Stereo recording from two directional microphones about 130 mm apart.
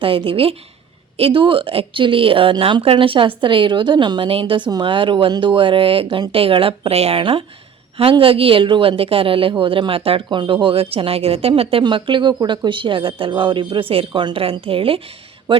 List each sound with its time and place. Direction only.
0.0 s a man's voice: 45° right (ahead or behind)